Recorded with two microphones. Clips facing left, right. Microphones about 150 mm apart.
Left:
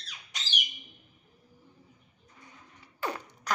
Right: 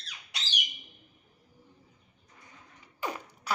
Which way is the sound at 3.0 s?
10° right (ahead or behind).